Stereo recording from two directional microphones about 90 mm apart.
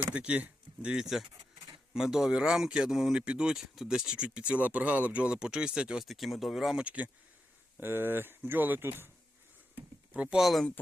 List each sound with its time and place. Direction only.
0.0 s speech: 15° right (ahead or behind)
6.8 s speech: 15° right (ahead or behind)
10.1 s speech: 10° right (ahead or behind)